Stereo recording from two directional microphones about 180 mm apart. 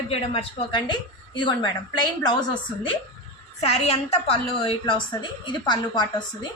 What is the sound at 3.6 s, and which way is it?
A woman's voice, 35° left (ahead or behind).